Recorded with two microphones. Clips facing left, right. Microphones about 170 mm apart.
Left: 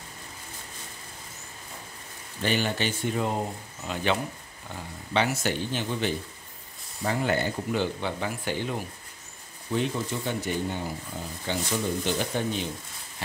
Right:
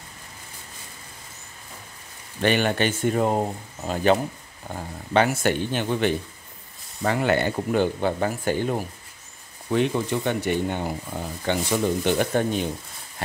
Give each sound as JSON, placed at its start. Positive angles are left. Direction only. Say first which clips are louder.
{"t": 2.4, "sound": "speech", "louder": "right 6 dB", "side_deg": -60}
{"t": 7.0, "sound": "speech", "louder": "right 5 dB", "side_deg": -70}
{"t": 9.7, "sound": "speech", "louder": "right 6 dB", "side_deg": -65}